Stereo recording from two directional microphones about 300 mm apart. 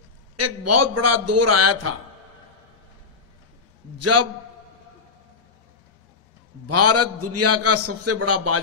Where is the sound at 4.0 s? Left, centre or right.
Right.